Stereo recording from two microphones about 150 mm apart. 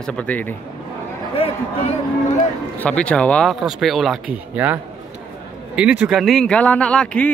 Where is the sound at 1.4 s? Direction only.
40° left (ahead or behind).